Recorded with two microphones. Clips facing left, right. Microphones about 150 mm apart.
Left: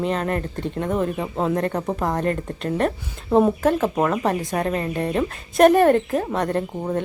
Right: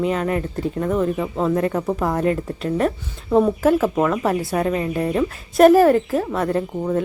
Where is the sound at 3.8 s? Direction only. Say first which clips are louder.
Right 2 dB; 20° left (ahead or behind).